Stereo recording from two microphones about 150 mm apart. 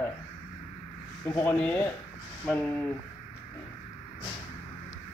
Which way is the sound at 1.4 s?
15° left (ahead or behind).